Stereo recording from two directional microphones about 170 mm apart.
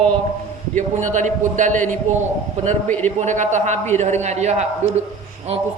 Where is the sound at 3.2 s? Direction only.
45° right (ahead or behind).